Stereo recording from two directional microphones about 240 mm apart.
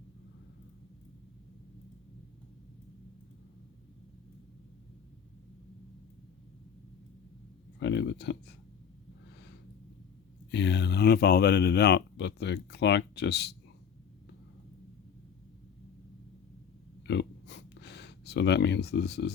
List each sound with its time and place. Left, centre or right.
7.8 s speech: left
10.5 s speech: left
17.1 s a sound: left